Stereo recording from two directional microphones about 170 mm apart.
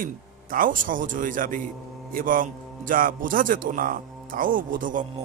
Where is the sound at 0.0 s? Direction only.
55° right (ahead or behind).